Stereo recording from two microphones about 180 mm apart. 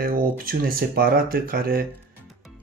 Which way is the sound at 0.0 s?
55° right (ahead or behind).